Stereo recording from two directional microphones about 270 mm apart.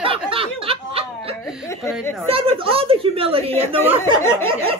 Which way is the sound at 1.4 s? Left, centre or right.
Centre.